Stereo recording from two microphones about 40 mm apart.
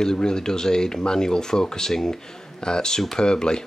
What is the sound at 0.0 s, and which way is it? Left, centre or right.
A man's voice, centre.